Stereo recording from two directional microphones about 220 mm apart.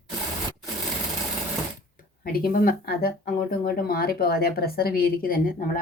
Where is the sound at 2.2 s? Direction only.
40° left (ahead or behind).